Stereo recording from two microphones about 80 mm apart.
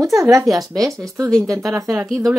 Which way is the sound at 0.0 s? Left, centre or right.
Right.